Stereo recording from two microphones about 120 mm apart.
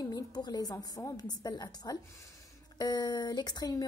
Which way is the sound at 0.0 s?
35° left (ahead or behind).